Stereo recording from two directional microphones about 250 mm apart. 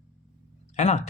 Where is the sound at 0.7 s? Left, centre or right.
Left.